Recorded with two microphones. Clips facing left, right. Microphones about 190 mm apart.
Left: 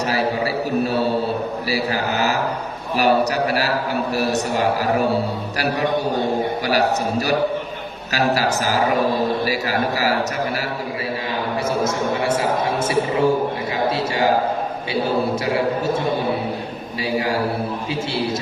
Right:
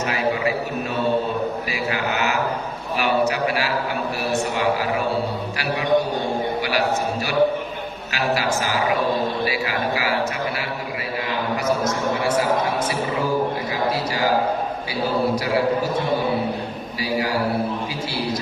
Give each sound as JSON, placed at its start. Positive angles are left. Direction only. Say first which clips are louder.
{"t": 0.1, "sound": "a sound", "louder": "even", "side_deg": 35}
{"t": 1.7, "sound": "a man's voice", "louder": "left 3 dB", "side_deg": 35}
{"t": 8.1, "sound": "a man's voice", "louder": "left 3 dB", "side_deg": 40}
{"t": 12.9, "sound": "a man's voice", "louder": "left 5 dB", "side_deg": 25}